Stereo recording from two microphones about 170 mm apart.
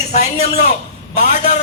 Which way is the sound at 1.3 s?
45° left (ahead or behind).